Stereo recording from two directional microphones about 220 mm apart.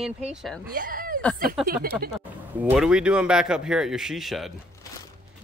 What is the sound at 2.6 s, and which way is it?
A woman's voice, 5° right (ahead or behind).